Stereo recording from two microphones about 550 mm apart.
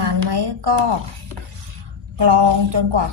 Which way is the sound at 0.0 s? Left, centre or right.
Right.